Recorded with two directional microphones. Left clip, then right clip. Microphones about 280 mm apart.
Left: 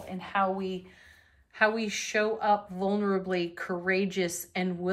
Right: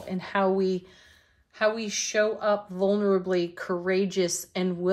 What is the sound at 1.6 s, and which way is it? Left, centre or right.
Speech, centre.